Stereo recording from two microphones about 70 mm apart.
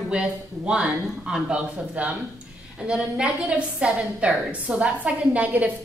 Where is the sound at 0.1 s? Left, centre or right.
Centre.